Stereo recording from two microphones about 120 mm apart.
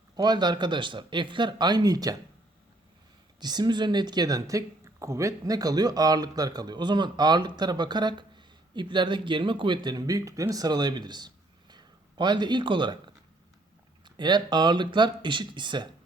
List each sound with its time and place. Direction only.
0.2 s speech: 35° right (ahead or behind)
3.4 s speech: 35° right (ahead or behind)
14.0 s speech: 40° right (ahead or behind)